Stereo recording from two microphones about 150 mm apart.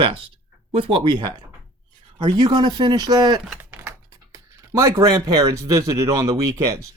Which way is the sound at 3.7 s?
15° right (ahead or behind).